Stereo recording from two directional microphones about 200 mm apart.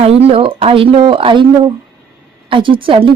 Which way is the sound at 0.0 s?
30° right (ahead or behind).